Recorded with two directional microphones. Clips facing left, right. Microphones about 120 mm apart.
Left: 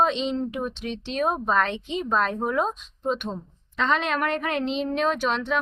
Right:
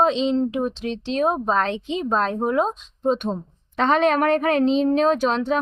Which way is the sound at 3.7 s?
45° right (ahead or behind).